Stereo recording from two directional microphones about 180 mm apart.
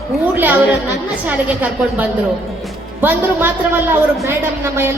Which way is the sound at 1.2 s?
10° right (ahead or behind).